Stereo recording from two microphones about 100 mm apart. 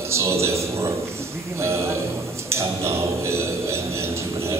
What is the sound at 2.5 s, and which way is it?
Speech, 25° right (ahead or behind).